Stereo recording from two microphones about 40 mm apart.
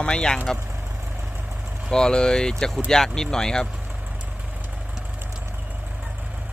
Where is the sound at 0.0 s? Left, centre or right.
Left.